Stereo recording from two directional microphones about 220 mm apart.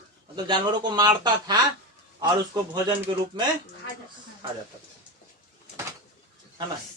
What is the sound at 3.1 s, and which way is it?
Speech, 20° right (ahead or behind).